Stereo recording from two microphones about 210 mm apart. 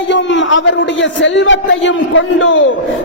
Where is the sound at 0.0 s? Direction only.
60° left (ahead or behind).